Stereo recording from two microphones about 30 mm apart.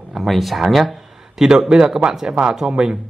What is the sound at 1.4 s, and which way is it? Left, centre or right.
Speech, right.